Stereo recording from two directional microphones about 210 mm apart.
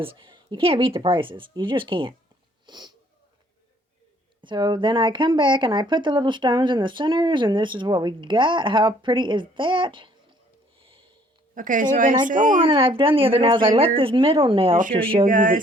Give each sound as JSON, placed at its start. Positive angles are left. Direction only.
{"t": 0.0, "sound": "speech", "side_deg": -25}
{"t": 4.4, "sound": "speech", "side_deg": -20}
{"t": 10.8, "sound": "a sound", "side_deg": -25}
{"t": 11.5, "sound": "speech", "side_deg": -40}
{"t": 12.5, "sound": "speech", "side_deg": -25}
{"t": 15.3, "sound": "speech", "side_deg": -40}